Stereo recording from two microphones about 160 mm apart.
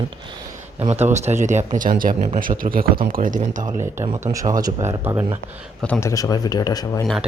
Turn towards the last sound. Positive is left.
turn(degrees=25)  # may be behind; listen again after turning